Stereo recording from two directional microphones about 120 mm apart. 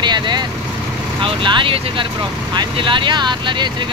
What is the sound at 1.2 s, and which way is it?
Speech, 45° right (ahead or behind).